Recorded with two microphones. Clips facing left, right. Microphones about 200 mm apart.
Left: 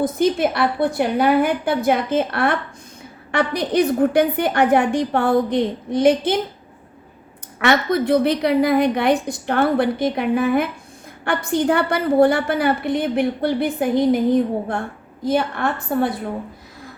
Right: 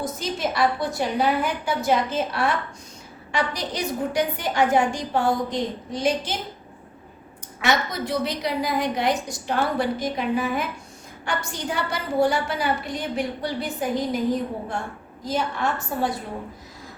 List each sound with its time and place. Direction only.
0.0 s a woman's voice: 55° left (ahead or behind)
7.6 s a woman's voice: 60° left (ahead or behind)
15.2 s a woman's voice: 60° left (ahead or behind)